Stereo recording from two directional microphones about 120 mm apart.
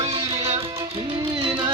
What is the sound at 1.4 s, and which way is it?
Music, 40° right (ahead or behind).